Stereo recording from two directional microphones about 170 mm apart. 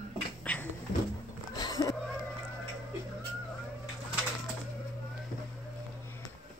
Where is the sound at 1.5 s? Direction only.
20° left (ahead or behind).